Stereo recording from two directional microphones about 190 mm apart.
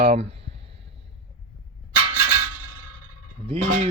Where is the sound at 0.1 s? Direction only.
30° right (ahead or behind).